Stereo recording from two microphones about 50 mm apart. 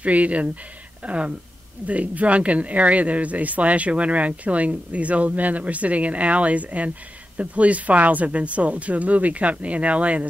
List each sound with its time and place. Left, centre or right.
0.0 s speech: right